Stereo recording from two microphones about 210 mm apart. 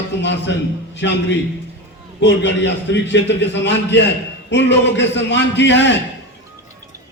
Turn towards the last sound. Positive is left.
turn(degrees=55)  # may be behind; listen again after turning